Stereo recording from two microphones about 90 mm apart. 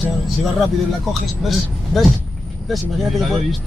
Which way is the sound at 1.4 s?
Centre (ahead or behind).